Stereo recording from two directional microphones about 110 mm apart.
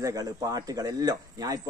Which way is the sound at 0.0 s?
35° right (ahead or behind).